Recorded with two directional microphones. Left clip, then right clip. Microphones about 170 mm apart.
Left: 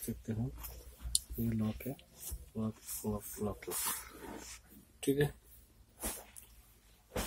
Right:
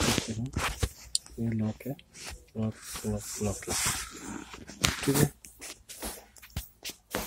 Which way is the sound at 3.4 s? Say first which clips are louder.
Right 6 dB; 5° left (ahead or behind).